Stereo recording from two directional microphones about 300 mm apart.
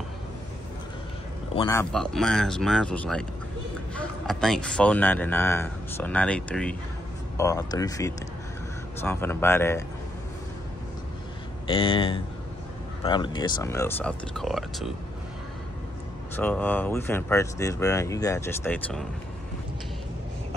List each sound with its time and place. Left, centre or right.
1.5 s speech: centre
11.6 s speech: centre
16.3 s speech: centre